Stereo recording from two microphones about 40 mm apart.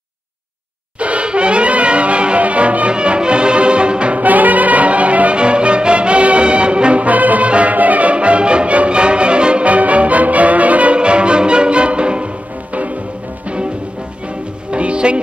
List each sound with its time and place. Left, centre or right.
0.9 s music: right
4.2 s music: right
11.0 s music: right
14.7 s music: right